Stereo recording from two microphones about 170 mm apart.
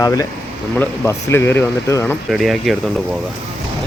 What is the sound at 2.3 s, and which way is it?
Speech, centre (ahead or behind).